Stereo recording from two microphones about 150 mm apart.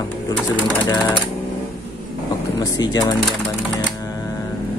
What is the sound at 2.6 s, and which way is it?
Speech, 25° left (ahead or behind).